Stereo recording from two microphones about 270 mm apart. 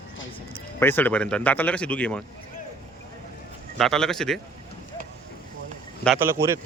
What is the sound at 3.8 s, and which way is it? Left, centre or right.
Speech, centre.